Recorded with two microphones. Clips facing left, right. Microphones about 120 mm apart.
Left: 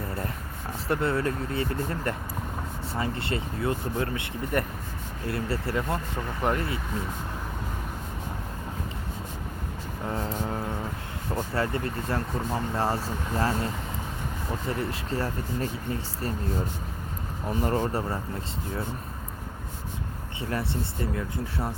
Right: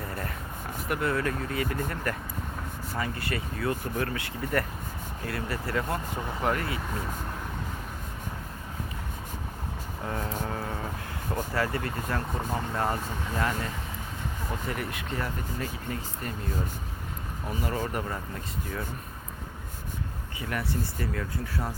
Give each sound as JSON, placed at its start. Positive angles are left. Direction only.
{"t": 0.9, "sound": "speech", "side_deg": 30}
{"t": 10.1, "sound": "speech", "side_deg": 25}
{"t": 14.7, "sound": "speech", "side_deg": 30}
{"t": 17.5, "sound": "speech", "side_deg": 40}
{"t": 20.4, "sound": "speech", "side_deg": 30}